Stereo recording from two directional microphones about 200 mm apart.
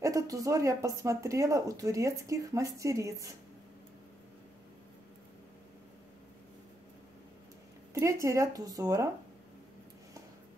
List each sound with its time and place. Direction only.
0.0 s speech: 15° right (ahead or behind)
7.9 s speech: 15° right (ahead or behind)